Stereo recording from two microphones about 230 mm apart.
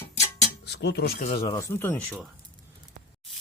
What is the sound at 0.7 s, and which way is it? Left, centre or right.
Speech, left.